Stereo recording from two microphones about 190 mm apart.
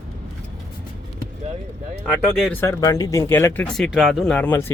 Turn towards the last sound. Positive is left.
turn(degrees=10)  # may be behind; listen again after turning